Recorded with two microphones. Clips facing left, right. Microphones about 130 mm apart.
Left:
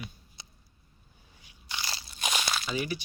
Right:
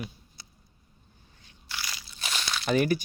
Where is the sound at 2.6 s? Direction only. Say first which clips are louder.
Right 8 dB; 55° right (ahead or behind).